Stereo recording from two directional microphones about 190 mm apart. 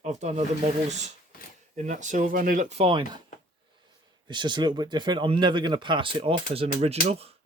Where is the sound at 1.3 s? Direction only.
50° left (ahead or behind).